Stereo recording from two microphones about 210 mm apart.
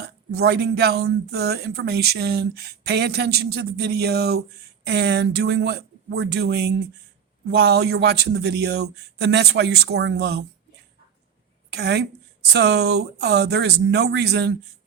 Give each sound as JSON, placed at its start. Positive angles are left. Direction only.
{"t": 0.0, "sound": "speech", "side_deg": -50}
{"t": 11.7, "sound": "speech", "side_deg": -50}